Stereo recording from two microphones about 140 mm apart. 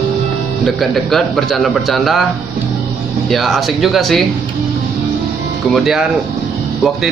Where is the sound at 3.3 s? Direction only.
Centre (ahead or behind).